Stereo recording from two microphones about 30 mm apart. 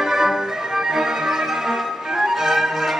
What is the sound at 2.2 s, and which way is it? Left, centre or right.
Music, centre.